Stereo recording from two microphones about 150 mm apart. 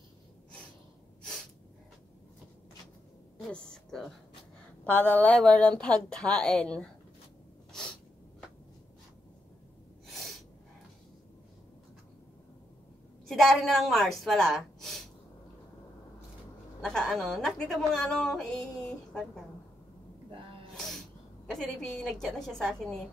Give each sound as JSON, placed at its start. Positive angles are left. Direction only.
{"t": 4.8, "sound": "a woman's voice", "side_deg": 10}
{"t": 10.0, "sound": "snort", "side_deg": 0}
{"t": 13.3, "sound": "a woman's voice", "side_deg": 0}
{"t": 16.8, "sound": "a woman's voice", "side_deg": 5}
{"t": 20.2, "sound": "sneeze", "side_deg": -35}
{"t": 20.7, "sound": "sneeze", "side_deg": 0}
{"t": 21.5, "sound": "a woman's voice", "side_deg": 0}